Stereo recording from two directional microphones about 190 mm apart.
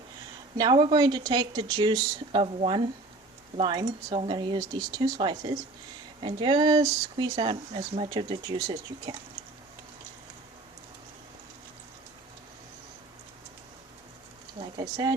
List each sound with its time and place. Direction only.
0.5 s speech: 25° right (ahead or behind)
14.8 s speech: 20° right (ahead or behind)